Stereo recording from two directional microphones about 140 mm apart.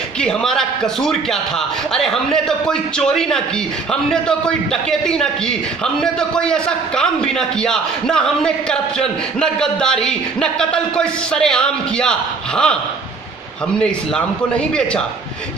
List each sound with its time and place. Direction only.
0.2 s a man's voice: 5° left (ahead or behind)
6.1 s a man's voice: 5° left (ahead or behind)
13.7 s a man's voice: 5° left (ahead or behind)